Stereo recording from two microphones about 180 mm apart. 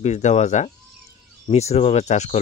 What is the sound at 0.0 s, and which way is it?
Speech, 40° left (ahead or behind).